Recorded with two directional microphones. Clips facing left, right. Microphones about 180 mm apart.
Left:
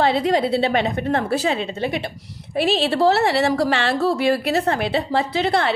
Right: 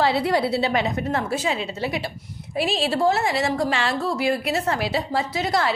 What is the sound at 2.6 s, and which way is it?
A woman's voice, 65° left (ahead or behind).